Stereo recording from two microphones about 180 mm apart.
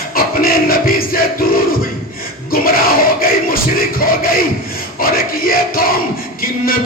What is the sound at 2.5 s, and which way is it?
A man's voice, 55° left (ahead or behind).